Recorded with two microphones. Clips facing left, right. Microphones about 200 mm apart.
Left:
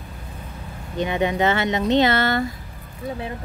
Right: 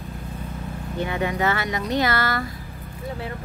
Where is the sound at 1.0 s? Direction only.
20° left (ahead or behind).